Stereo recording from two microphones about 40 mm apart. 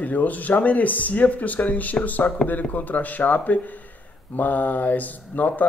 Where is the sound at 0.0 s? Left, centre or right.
Left.